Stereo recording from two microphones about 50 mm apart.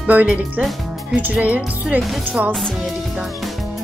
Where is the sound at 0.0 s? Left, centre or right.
Right.